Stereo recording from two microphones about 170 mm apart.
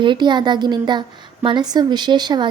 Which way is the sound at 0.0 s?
25° right (ahead or behind).